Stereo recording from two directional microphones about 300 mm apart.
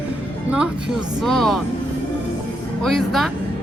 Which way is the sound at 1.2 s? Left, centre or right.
Centre.